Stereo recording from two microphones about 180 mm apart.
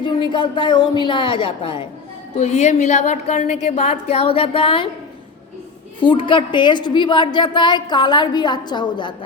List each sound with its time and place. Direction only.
0.0 s a woman's voice: 25° left (ahead or behind)
2.3 s a woman's voice: 40° left (ahead or behind)
6.0 s a woman's voice: 25° left (ahead or behind)